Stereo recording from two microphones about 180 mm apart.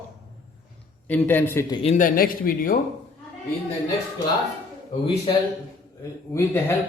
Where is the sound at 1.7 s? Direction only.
35° left (ahead or behind).